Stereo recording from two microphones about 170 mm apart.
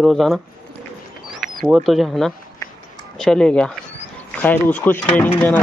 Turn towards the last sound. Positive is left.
turn(degrees=10)  # may be behind; listen again after turning